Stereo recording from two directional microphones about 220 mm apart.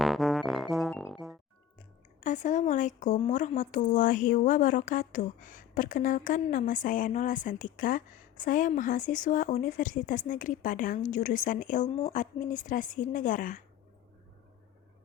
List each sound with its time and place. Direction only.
0.0 s music: centre (ahead or behind)
2.2 s speech: 35° left (ahead or behind)